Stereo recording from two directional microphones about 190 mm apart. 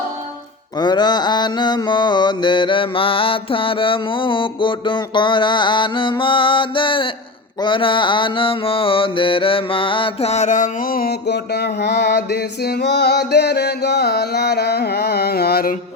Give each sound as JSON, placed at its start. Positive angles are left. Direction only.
{"t": 0.8, "sound": "mantra", "side_deg": 25}